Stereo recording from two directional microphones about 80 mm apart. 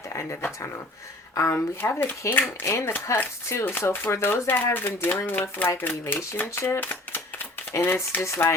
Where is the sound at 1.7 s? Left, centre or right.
Left.